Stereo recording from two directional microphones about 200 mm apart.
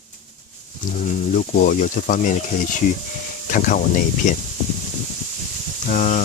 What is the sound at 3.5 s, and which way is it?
Speech, 40° left (ahead or behind).